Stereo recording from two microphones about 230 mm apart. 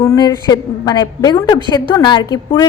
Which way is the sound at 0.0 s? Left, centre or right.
Centre.